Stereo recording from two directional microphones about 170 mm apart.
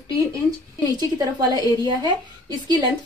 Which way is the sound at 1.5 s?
25° right (ahead or behind).